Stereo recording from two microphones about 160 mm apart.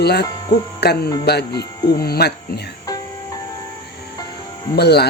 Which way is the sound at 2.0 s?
75° left (ahead or behind).